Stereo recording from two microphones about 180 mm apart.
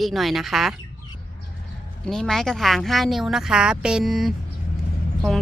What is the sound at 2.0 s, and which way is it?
Speech, centre (ahead or behind).